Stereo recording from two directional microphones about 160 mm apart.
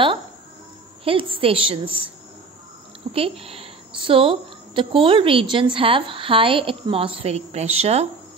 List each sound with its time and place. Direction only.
1.0 s a woman's voice: 35° right (ahead or behind)